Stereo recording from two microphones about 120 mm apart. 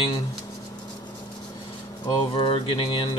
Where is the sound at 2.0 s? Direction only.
45° left (ahead or behind).